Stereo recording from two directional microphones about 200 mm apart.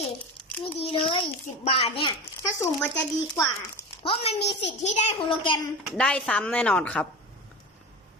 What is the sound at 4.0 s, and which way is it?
A child's voice, 30° left (ahead or behind).